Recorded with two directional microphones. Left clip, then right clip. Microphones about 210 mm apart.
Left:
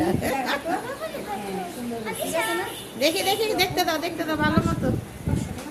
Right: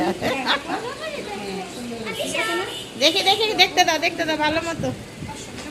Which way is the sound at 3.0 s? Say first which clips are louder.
Right 4 dB; 15° left (ahead or behind).